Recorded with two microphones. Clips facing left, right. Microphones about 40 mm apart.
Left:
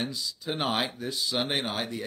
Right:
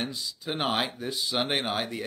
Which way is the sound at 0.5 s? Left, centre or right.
Centre.